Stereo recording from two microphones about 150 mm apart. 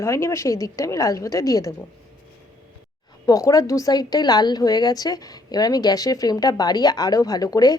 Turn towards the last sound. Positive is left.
turn(degrees=25)  # may be behind; listen again after turning